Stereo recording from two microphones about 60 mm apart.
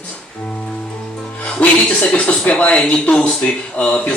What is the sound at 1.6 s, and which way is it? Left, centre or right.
A man's voice, left.